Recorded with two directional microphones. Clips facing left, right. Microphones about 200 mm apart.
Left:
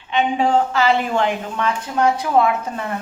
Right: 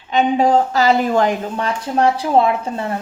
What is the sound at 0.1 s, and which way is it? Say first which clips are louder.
A woman's voice: right 3 dB; 40° right (ahead or behind).